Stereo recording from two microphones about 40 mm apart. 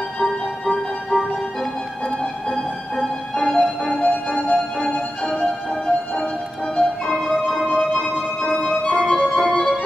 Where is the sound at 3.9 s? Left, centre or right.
Left.